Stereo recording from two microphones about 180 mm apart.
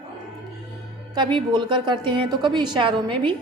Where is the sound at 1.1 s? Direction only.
25° right (ahead or behind).